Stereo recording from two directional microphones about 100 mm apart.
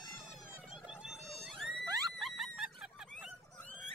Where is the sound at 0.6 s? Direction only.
10° right (ahead or behind).